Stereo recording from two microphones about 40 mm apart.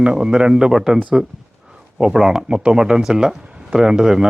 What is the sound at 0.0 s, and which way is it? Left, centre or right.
A man's voice, right.